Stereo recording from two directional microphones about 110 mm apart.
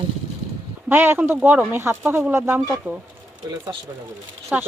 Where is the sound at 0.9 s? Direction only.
20° right (ahead or behind).